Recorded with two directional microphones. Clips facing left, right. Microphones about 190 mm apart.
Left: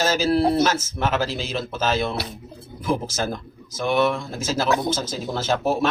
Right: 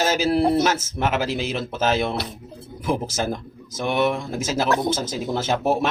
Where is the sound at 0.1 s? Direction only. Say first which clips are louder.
Even; 15° right (ahead or behind).